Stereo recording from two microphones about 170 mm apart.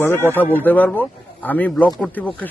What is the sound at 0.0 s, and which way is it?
Speech, 15° left (ahead or behind).